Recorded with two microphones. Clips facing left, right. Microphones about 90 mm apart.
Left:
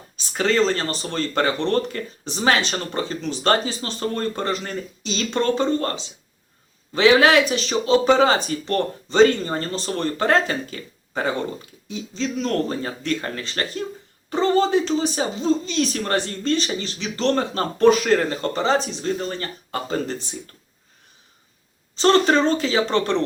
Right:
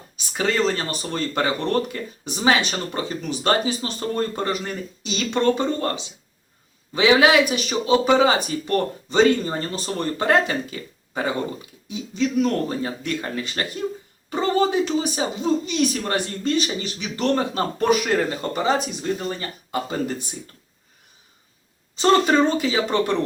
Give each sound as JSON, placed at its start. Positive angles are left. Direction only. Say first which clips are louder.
{"t": 0.3, "sound": "speech", "louder": "left 2 dB", "side_deg": -15}
{"t": 21.9, "sound": "speech", "louder": "even", "side_deg": -15}